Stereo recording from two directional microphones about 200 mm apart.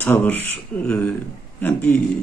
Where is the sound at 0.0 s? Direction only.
10° left (ahead or behind).